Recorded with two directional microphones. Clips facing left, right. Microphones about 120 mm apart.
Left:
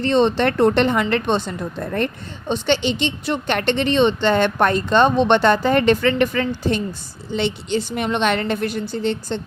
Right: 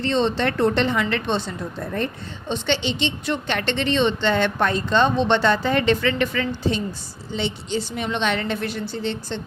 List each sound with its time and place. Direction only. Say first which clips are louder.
0.0 s a woman's voice: left 4 dB; 50° left (ahead or behind)
7.3 s a woman's voice: left 4 dB; 60° left (ahead or behind); by 9.4 s 45° left (ahead or behind)